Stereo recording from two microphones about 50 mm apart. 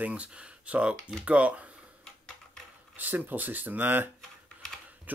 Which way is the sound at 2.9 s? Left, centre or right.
Right.